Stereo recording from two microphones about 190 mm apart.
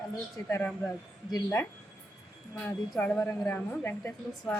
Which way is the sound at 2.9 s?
10° left (ahead or behind).